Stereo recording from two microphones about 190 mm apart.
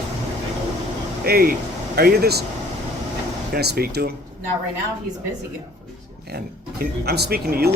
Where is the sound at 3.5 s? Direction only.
55° right (ahead or behind).